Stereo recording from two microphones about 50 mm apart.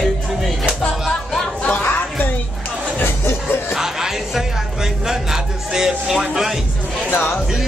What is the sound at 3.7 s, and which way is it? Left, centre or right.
Music, centre.